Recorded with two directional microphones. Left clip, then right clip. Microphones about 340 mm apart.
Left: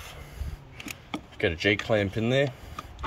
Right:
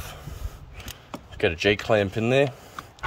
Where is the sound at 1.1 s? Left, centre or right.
Centre.